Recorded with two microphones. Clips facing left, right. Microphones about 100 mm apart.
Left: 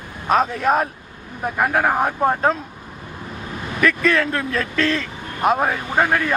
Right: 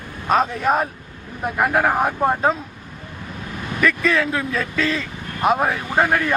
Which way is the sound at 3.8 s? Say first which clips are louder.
Left 1 dB; centre (ahead or behind).